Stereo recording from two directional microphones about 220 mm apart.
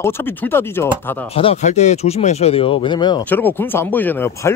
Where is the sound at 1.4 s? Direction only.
30° left (ahead or behind).